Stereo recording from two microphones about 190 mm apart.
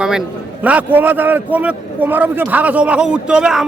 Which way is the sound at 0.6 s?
10° right (ahead or behind).